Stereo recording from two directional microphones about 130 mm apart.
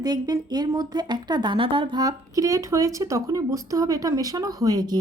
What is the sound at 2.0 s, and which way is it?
Speech, 25° right (ahead or behind).